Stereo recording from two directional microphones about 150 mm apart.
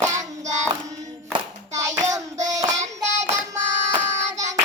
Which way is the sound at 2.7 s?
50° right (ahead or behind).